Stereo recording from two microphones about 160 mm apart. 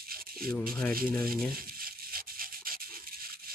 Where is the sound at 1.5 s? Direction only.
65° right (ahead or behind).